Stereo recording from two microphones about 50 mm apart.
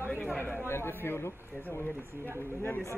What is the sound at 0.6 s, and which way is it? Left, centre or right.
Speech, left.